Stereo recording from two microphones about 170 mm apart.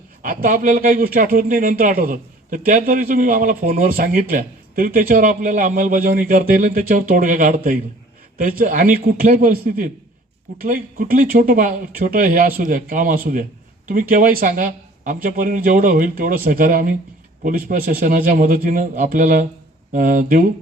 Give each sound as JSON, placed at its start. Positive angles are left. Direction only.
{"t": 0.2, "sound": "speech", "side_deg": -55}